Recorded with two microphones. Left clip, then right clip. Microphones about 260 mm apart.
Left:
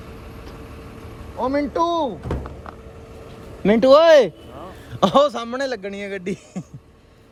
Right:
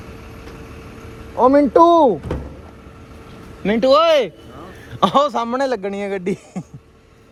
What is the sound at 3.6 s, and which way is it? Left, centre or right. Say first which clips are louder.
Speech: left 1 dB; left.